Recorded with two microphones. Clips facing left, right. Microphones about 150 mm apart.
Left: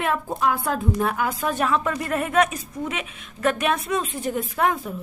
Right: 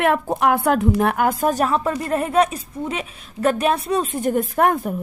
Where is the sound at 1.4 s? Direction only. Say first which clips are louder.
Right 4 dB; 40° right (ahead or behind).